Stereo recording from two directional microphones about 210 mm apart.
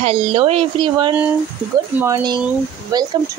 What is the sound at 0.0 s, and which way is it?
Speech, 30° right (ahead or behind).